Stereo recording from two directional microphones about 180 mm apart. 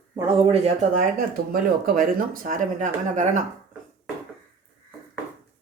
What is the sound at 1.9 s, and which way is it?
Speech, 50° right (ahead or behind).